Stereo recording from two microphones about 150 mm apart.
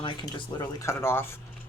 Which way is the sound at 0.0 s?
35° left (ahead or behind).